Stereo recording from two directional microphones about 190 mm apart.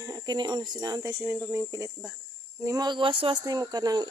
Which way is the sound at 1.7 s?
15° right (ahead or behind).